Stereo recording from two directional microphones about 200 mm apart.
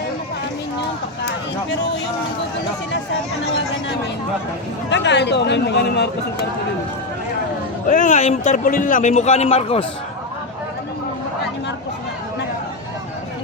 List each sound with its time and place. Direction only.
4.9 s speech: 60° left (ahead or behind)
7.9 s a man's voice: 40° left (ahead or behind)